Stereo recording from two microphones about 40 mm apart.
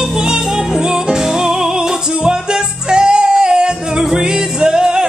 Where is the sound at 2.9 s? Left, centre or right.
Centre.